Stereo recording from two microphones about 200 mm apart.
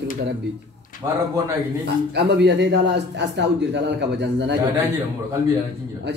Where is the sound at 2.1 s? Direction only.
55° right (ahead or behind).